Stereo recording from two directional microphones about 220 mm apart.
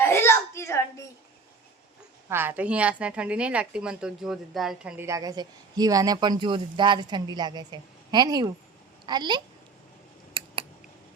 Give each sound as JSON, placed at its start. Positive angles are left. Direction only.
{"t": 0.0, "sound": "a sound", "side_deg": 10}
{"t": 2.3, "sound": "a woman's voice", "side_deg": -10}
{"t": 10.3, "sound": "scissors", "side_deg": -25}